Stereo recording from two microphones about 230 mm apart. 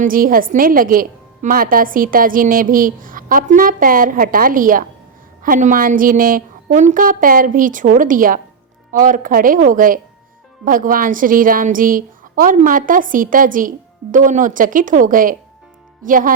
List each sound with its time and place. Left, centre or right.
0.0 s a woman's voice: right